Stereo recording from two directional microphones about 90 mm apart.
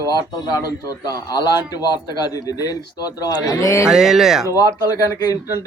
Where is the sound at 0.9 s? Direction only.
45° left (ahead or behind).